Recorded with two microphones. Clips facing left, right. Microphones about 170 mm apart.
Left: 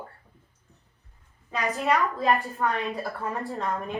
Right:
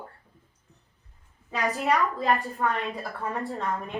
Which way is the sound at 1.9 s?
Centre (ahead or behind).